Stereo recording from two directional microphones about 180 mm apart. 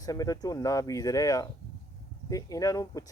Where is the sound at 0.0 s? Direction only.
20° left (ahead or behind).